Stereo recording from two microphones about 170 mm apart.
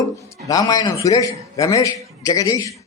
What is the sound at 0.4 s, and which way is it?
A man's voice, 20° left (ahead or behind).